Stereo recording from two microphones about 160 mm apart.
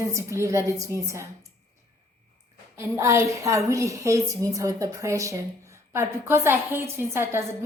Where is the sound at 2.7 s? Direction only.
15° right (ahead or behind).